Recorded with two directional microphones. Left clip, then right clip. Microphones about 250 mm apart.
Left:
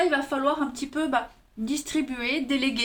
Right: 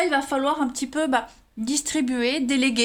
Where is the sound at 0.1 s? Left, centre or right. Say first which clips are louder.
Right 2 dB; right.